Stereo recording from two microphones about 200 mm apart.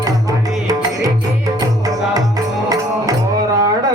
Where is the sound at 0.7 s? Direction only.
15° right (ahead or behind).